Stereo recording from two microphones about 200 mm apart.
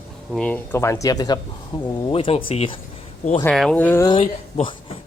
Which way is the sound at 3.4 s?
5° left (ahead or behind).